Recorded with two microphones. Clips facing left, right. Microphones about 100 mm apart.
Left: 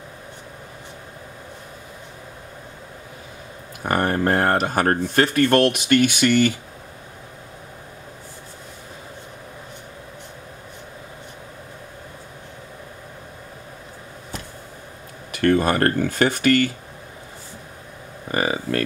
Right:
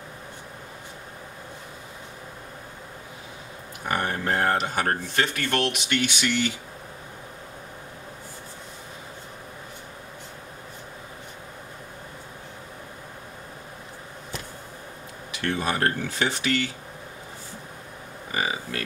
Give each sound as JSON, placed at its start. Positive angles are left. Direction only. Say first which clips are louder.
{"t": 3.9, "sound": "speech", "louder": "left 6 dB", "side_deg": 45}
{"t": 15.3, "sound": "speech", "louder": "left 9 dB", "side_deg": 50}
{"t": 18.3, "sound": "speech", "louder": "left 7 dB", "side_deg": 50}